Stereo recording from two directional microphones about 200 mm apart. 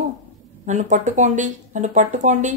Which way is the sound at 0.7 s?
35° right (ahead or behind).